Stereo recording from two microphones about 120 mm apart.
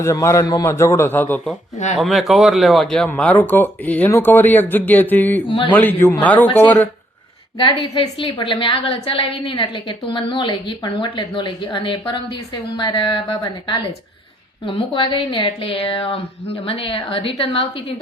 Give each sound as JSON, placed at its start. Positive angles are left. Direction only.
{"t": 0.0, "sound": "a man's voice", "side_deg": 25}
{"t": 2.0, "sound": "speech", "side_deg": 0}
{"t": 5.5, "sound": "a woman's voice", "side_deg": 45}
{"t": 5.7, "sound": "speech", "side_deg": 15}
{"t": 7.6, "sound": "a woman's voice", "side_deg": 45}